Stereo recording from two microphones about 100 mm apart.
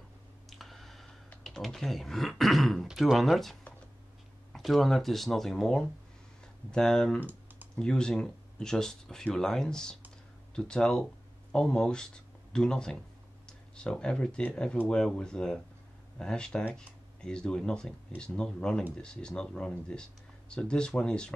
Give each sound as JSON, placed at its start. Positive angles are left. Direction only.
{"t": 0.5, "sound": "clicking", "side_deg": 0}
{"t": 1.4, "sound": "speech", "side_deg": 5}
{"t": 7.2, "sound": "typing", "side_deg": -20}
{"t": 7.7, "sound": "speech", "side_deg": 5}